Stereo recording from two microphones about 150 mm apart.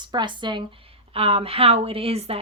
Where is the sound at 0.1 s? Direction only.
30° right (ahead or behind).